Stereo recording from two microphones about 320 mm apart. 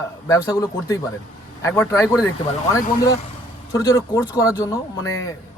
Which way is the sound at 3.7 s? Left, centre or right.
Centre.